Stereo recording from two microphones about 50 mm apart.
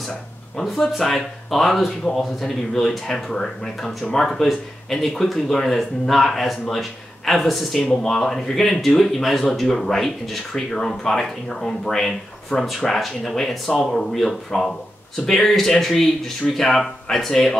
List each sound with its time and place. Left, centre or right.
0.7 s speech: centre
12.5 s speech: left
12.8 s speech: centre